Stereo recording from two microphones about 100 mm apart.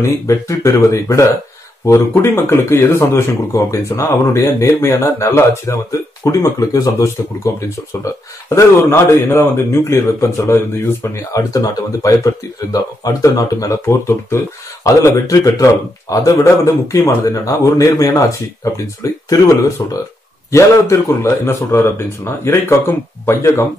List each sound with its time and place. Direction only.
0.0 s speech: 30° left (ahead or behind)
11.5 s speech: 35° left (ahead or behind)